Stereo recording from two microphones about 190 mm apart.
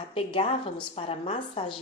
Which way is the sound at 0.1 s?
30° left (ahead or behind).